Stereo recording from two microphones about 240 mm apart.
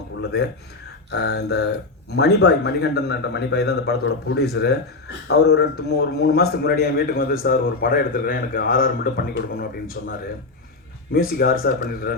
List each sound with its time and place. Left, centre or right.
0.3 s a man's voice: left
11.3 s a man's voice: left